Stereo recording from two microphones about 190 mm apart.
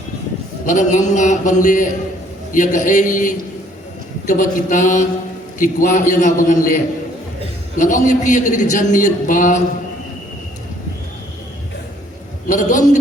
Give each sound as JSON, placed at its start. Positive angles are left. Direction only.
{"t": 0.6, "sound": "a man's voice", "side_deg": 40}
{"t": 12.5, "sound": "a man's voice", "side_deg": 45}